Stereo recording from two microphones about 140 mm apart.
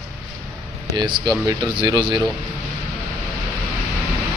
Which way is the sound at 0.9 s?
35° right (ahead or behind).